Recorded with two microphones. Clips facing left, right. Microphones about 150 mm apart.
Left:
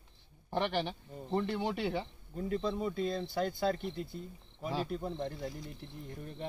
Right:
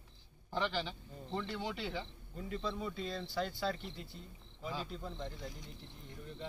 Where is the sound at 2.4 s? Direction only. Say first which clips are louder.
Left 6 dB; 40° left (ahead or behind).